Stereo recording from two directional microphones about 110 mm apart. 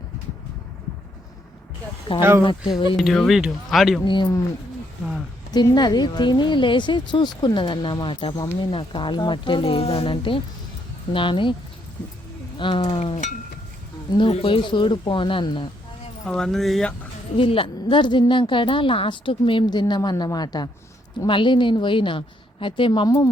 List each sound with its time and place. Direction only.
2.1 s speech: 55° left (ahead or behind)
2.9 s speech: 5° left (ahead or behind)
4.0 s a woman's voice: 45° left (ahead or behind)
5.5 s a woman's voice: 40° left (ahead or behind)
12.5 s speech: 50° left (ahead or behind)
14.3 s a woman's voice: 65° left (ahead or behind); by 15.7 s 45° left (ahead or behind)
16.2 s speech: 5° left (ahead or behind)
17.3 s a woman's voice: 55° left (ahead or behind); by 20.7 s 35° left (ahead or behind)
21.2 s a woman's voice: 50° left (ahead or behind)
23.0 s speech: 35° left (ahead or behind)